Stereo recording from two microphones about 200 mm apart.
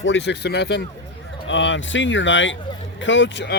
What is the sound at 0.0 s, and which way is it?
Speech, 60° left (ahead or behind).